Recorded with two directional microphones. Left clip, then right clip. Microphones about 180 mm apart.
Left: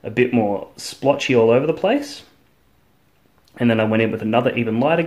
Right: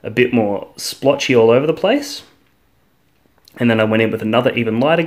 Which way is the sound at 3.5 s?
20° right (ahead or behind).